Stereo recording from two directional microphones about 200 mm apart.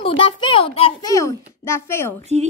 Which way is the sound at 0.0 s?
25° left (ahead or behind).